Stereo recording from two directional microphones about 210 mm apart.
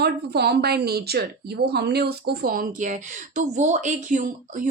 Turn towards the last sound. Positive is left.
turn(degrees=-35)  # may be behind; listen again after turning